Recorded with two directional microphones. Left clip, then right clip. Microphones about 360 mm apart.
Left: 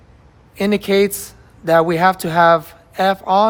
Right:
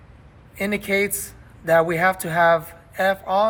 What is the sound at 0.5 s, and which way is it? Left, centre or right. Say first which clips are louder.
Speech: left 6 dB; left.